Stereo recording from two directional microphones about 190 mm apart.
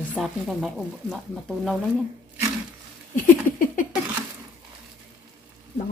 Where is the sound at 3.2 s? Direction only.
45° left (ahead or behind).